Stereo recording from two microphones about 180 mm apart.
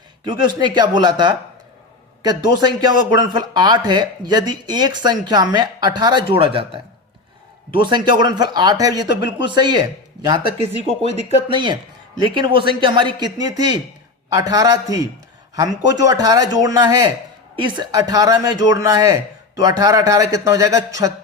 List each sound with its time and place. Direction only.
0.3 s speech: 25° right (ahead or behind)
2.6 s speech: 25° right (ahead or behind)
7.7 s speech: 25° right (ahead or behind)
10.8 s speech: 35° left (ahead or behind)
11.4 s speech: 25° right (ahead or behind)